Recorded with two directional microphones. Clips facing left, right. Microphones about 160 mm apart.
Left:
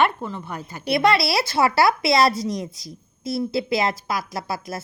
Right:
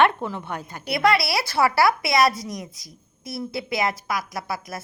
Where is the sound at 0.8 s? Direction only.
25° left (ahead or behind).